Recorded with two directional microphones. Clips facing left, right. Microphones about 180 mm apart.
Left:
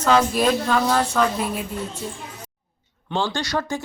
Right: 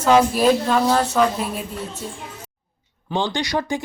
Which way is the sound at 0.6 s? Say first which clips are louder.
Right 2 dB; 25° right (ahead or behind).